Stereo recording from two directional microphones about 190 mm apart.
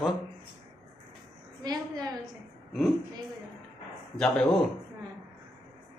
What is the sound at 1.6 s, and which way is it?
Speech, 20° right (ahead or behind).